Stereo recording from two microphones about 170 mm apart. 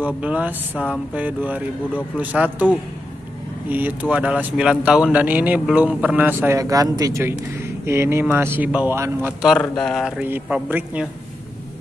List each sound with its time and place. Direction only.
0.0 s speech: 10° right (ahead or behind)
9.6 s speech: 5° left (ahead or behind)